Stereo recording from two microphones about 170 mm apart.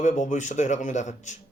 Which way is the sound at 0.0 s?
45° left (ahead or behind).